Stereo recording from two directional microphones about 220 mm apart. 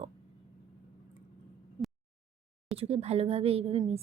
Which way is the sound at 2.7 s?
25° right (ahead or behind).